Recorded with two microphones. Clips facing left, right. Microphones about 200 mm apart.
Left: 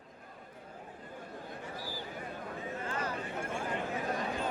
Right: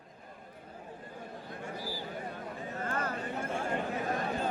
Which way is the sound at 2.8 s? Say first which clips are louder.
Right 4 dB; 50° right (ahead or behind).